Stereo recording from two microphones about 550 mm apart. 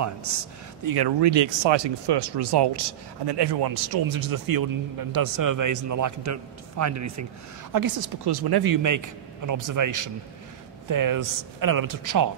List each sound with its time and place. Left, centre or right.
0.8 s speech: right